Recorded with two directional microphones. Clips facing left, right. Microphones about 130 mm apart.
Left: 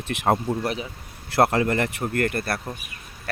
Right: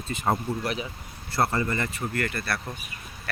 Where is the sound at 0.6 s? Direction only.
35° left (ahead or behind).